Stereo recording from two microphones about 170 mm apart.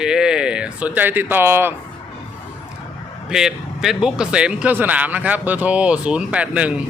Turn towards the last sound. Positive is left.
turn(degrees=-5)  # may be behind; listen again after turning